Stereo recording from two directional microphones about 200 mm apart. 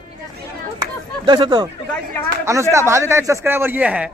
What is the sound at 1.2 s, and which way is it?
Speech, 20° right (ahead or behind).